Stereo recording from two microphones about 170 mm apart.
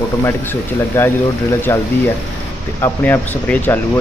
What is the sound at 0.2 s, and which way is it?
Speech, 15° left (ahead or behind).